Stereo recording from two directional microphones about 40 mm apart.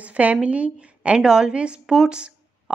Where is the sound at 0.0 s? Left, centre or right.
Right.